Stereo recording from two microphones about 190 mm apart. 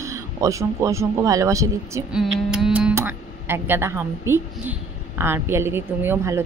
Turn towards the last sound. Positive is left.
turn(degrees=-10)  # may be behind; listen again after turning